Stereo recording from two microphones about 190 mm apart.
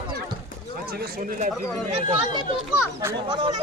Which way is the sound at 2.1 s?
25° right (ahead or behind).